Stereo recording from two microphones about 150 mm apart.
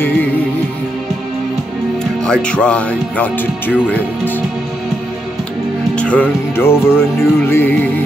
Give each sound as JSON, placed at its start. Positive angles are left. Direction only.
{"t": 2.2, "sound": "music", "side_deg": 5}
{"t": 5.9, "sound": "music", "side_deg": 10}